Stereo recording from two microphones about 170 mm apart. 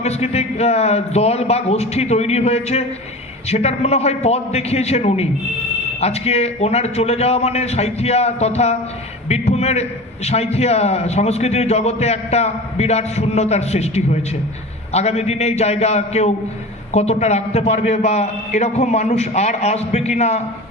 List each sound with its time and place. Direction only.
0.0 s a man's voice: 40° left (ahead or behind)